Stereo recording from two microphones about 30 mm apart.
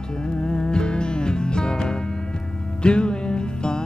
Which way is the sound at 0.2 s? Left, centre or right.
Left.